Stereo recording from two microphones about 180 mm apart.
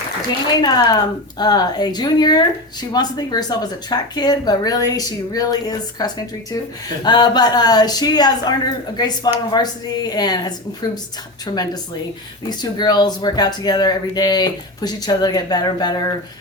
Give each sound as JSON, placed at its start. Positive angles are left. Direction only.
{"t": 0.6, "sound": "a woman's voice", "side_deg": 20}